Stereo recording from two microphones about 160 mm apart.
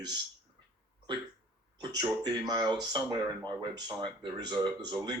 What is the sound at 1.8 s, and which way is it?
Speech, 25° right (ahead or behind).